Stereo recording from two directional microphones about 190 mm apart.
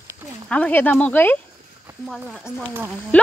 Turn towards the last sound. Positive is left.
turn(degrees=5)  # may be behind; listen again after turning